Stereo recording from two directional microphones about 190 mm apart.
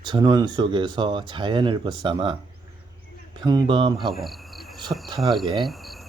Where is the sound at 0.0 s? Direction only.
20° right (ahead or behind).